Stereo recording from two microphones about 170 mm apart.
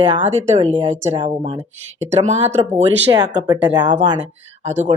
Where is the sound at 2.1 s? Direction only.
40° right (ahead or behind).